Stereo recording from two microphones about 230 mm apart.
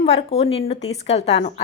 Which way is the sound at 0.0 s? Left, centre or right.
Left.